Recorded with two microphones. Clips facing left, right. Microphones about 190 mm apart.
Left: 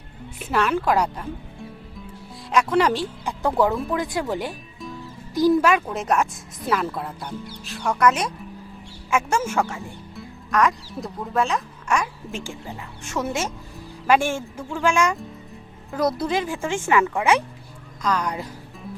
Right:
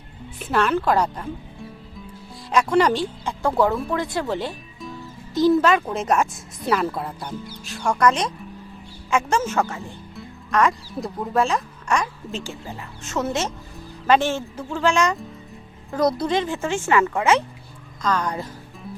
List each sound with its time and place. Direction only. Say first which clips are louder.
0.3 s speech: right 1 dB; 5° left (ahead or behind)
2.5 s speech: right 1 dB; centre (ahead or behind)
3.2 s speech: even; 15° left (ahead or behind)
10.2 s music: right 1 dB; centre (ahead or behind)
11.3 s speech: right 2 dB; centre (ahead or behind)